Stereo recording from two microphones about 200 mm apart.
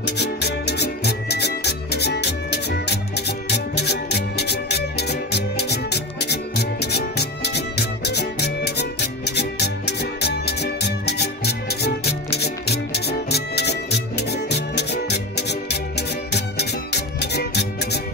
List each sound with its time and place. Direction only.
0.0 s music: 55° left (ahead or behind)